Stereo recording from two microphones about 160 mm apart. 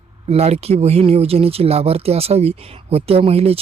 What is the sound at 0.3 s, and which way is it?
Speech, 40° right (ahead or behind).